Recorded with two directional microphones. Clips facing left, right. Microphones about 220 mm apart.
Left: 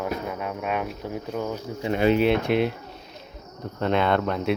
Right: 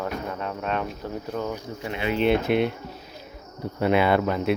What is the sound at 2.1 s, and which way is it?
Speech, centre (ahead or behind).